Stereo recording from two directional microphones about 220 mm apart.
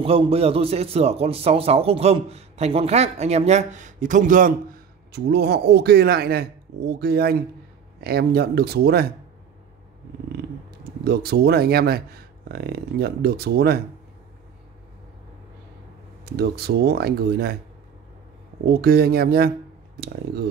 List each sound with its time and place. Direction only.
0.0 s a man's voice: 25° right (ahead or behind)
5.1 s speech: 45° right (ahead or behind)
10.8 s speech: 45° right (ahead or behind)
16.3 s speech: 45° right (ahead or behind)
18.7 s speech: 45° right (ahead or behind)